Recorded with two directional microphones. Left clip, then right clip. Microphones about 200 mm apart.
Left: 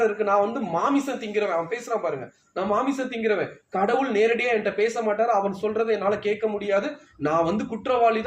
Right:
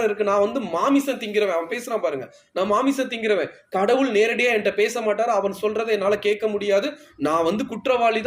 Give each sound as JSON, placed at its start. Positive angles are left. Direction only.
{"t": 0.2, "sound": "a man's voice", "side_deg": -35}